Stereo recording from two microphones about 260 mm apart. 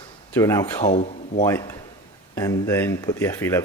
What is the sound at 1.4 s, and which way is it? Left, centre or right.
Speech, centre.